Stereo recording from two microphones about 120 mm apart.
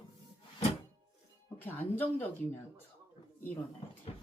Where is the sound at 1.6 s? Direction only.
15° left (ahead or behind).